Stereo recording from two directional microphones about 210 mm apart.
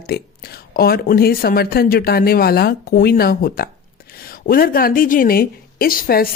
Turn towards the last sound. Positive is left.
turn(degrees=45)  # may be behind; listen again after turning